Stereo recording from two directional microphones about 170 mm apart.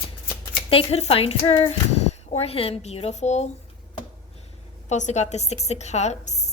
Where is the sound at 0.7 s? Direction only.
35° left (ahead or behind).